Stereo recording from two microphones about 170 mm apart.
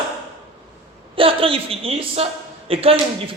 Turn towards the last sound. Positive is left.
turn(degrees=-35)  # may be behind; listen again after turning